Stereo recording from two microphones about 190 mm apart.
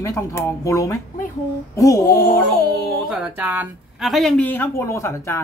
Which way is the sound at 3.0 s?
5° right (ahead or behind).